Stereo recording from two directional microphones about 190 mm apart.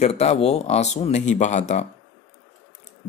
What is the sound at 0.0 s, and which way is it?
Speech, 35° left (ahead or behind).